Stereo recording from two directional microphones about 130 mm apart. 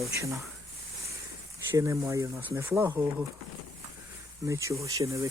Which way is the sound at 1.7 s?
25° right (ahead or behind).